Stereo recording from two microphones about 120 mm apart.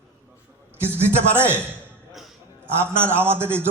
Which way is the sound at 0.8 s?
20° right (ahead or behind).